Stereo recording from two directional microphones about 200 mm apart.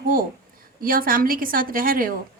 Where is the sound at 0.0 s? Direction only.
45° right (ahead or behind).